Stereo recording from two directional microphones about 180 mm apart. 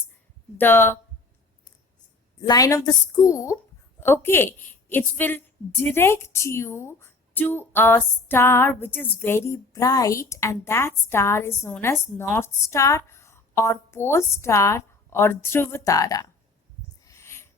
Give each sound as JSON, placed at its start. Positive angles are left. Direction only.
{"t": 0.6, "sound": "a woman's voice", "side_deg": 10}
{"t": 2.4, "sound": "a woman's voice", "side_deg": 20}
{"t": 17.1, "sound": "a sound", "side_deg": 15}